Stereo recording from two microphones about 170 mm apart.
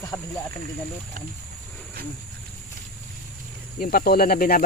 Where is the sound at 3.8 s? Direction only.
55° left (ahead or behind).